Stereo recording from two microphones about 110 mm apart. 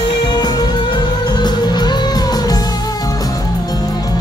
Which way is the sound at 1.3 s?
40° left (ahead or behind).